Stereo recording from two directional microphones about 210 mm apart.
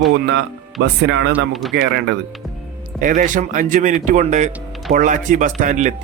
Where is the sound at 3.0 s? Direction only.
40° right (ahead or behind).